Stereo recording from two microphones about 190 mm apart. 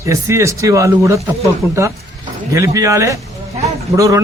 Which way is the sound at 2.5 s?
15° right (ahead or behind).